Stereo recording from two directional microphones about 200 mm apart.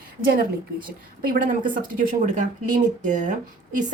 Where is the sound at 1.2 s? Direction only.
45° right (ahead or behind).